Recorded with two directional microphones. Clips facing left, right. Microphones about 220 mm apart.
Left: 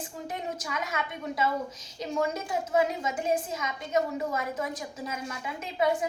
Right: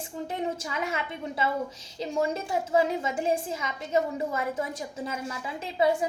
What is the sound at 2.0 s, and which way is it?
A woman's voice, 30° right (ahead or behind).